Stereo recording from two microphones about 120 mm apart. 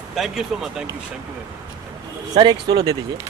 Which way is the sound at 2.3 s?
35° right (ahead or behind).